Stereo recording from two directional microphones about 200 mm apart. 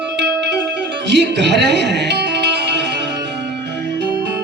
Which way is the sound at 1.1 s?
60° right (ahead or behind).